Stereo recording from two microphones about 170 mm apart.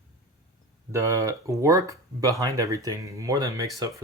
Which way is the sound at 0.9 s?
20° right (ahead or behind).